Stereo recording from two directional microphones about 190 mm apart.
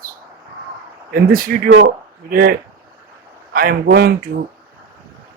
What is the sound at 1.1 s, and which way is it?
Speech, 50° right (ahead or behind).